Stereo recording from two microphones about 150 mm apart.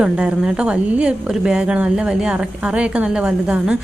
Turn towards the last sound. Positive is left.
turn(degrees=-10)  # may be behind; listen again after turning